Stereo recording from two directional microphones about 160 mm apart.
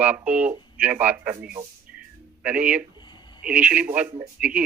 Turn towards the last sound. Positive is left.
turn(degrees=-10)  # may be behind; listen again after turning